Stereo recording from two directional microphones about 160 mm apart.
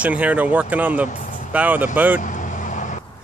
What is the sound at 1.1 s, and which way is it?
Vehicle, 50° left (ahead or behind).